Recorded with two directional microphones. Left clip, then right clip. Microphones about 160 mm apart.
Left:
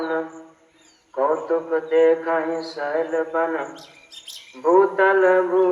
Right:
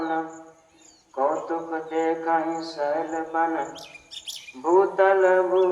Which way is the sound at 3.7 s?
65° right (ahead or behind).